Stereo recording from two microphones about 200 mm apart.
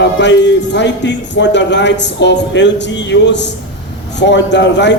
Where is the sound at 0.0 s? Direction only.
60° left (ahead or behind).